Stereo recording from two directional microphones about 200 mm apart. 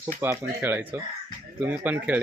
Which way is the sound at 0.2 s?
10° right (ahead or behind).